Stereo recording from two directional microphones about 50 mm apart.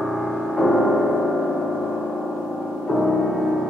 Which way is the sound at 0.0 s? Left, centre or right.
Centre.